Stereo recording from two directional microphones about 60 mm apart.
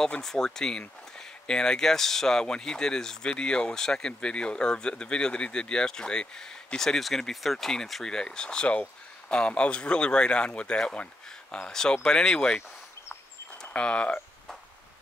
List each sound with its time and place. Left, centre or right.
0.0 s speech: centre